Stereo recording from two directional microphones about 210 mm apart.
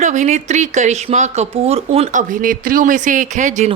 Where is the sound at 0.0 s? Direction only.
35° right (ahead or behind).